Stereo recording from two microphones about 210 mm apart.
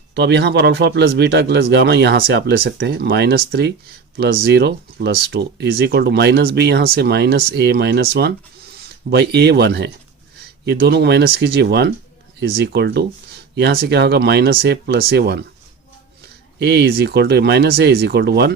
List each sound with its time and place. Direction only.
0.1 s speech: 55° right (ahead or behind)
16.6 s speech: 50° right (ahead or behind)